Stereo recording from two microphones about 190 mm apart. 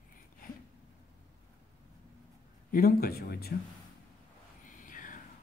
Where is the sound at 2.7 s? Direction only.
50° left (ahead or behind).